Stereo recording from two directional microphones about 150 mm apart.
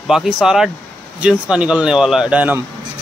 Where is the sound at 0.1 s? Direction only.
5° right (ahead or behind).